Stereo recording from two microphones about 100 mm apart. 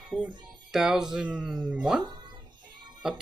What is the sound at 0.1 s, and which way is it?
Speech, 5° right (ahead or behind).